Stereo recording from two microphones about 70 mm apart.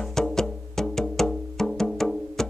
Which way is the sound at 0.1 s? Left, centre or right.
Centre.